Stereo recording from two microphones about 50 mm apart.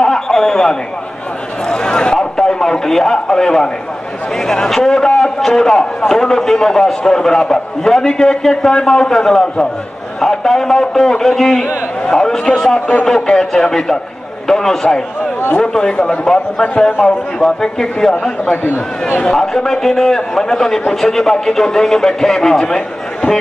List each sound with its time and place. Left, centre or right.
0.0 s a sound: centre
4.5 s a man's voice: centre
18.4 s a man's voice: left
19.3 s a man's voice: centre